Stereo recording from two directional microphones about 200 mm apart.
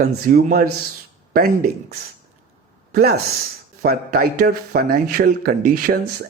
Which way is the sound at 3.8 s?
50° right (ahead or behind).